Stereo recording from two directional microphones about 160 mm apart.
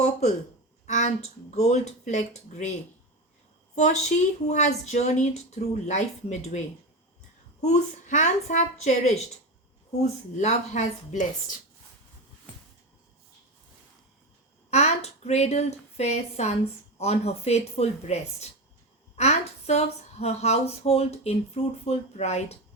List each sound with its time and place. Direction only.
0.0 s speech: 45° left (ahead or behind)
3.8 s speech: 45° left (ahead or behind)
7.6 s speech: 45° left (ahead or behind)
14.7 s speech: 45° left (ahead or behind)